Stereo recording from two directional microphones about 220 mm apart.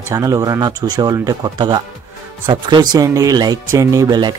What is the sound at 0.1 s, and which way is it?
Speech, 15° right (ahead or behind).